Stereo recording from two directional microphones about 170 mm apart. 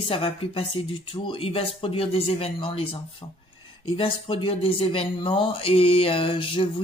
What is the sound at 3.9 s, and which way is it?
Speech, 30° left (ahead or behind).